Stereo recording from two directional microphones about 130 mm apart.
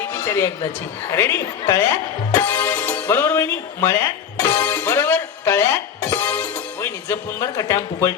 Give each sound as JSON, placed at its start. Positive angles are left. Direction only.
{"t": 0.0, "sound": "a sound", "side_deg": 20}
{"t": 1.1, "sound": "speech", "side_deg": 20}
{"t": 3.2, "sound": "music", "side_deg": 20}